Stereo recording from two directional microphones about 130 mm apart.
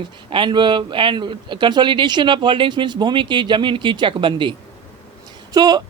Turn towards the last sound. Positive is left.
turn(degrees=-30)  # may be behind; listen again after turning